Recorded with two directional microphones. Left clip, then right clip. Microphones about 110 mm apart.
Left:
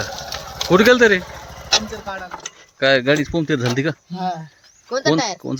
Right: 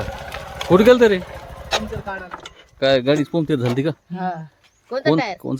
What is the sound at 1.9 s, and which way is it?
Speech, 20° right (ahead or behind).